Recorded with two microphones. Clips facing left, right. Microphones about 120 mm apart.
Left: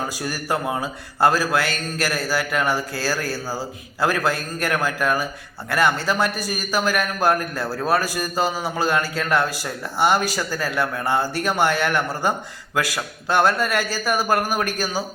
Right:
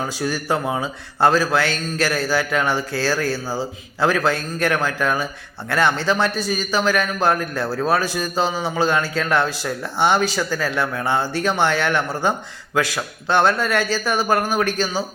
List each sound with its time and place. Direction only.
0.2 s a man's voice: 5° left (ahead or behind)